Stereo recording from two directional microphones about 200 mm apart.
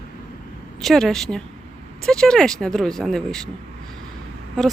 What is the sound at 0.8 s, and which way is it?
Speech, centre (ahead or behind).